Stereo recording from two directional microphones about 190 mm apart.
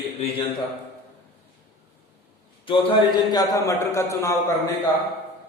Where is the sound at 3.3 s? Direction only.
15° left (ahead or behind).